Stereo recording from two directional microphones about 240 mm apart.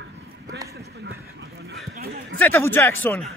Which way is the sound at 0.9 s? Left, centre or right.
Right.